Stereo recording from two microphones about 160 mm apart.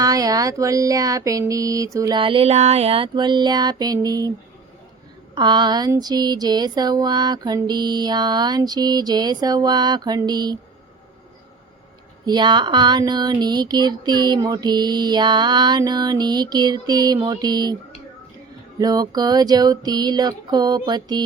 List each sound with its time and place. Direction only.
0.0 s speech: 20° right (ahead or behind)
5.3 s speech: 30° right (ahead or behind)
12.2 s speech: 25° right (ahead or behind)
18.8 s speech: 25° right (ahead or behind)